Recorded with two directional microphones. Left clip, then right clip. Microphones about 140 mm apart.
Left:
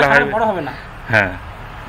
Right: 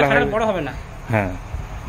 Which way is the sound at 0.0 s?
25° right (ahead or behind).